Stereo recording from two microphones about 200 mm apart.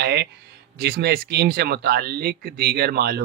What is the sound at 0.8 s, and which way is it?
Speech, 55° right (ahead or behind).